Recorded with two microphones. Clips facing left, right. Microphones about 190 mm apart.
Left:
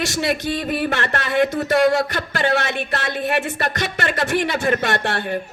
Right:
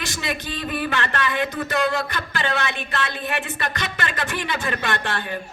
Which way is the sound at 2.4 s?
55° left (ahead or behind).